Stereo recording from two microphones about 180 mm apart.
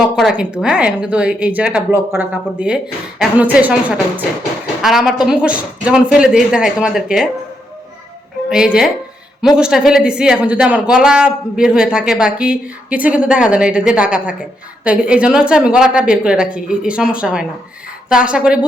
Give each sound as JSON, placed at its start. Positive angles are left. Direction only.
{"t": 0.0, "sound": "speech", "side_deg": 0}
{"t": 8.4, "sound": "speech", "side_deg": -5}